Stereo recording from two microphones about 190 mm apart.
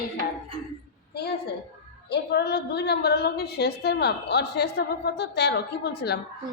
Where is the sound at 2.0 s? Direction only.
60° left (ahead or behind).